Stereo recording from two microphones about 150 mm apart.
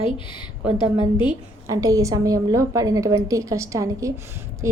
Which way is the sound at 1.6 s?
20° right (ahead or behind).